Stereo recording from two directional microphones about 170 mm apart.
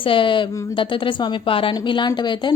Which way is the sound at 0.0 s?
30° left (ahead or behind).